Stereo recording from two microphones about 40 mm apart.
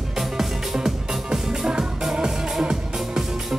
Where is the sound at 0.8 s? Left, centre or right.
Centre.